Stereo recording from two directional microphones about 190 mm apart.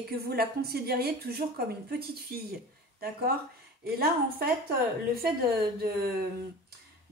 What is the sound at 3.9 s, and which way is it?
Speech, 50° right (ahead or behind).